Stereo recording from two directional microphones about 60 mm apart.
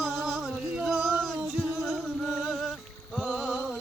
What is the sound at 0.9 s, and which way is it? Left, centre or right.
Child singing, centre.